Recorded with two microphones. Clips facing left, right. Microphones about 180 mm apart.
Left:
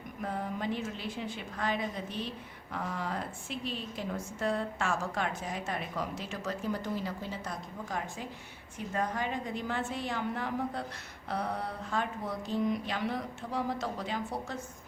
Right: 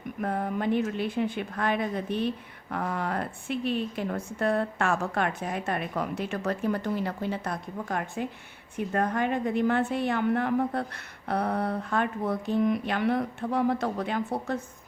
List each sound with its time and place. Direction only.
0.2 s a woman's voice: 55° right (ahead or behind)